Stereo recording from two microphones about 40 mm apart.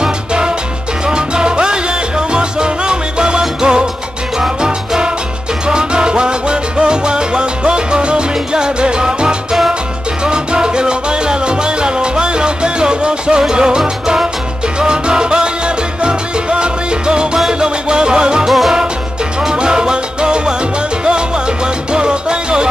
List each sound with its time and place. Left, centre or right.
0.0 s music: right
1.0 s salsa music: right
4.4 s music: centre
5.7 s salsa music: right
10.2 s music: right
14.8 s salsa music: right
19.5 s salsa music: right
21.9 s salsa music: right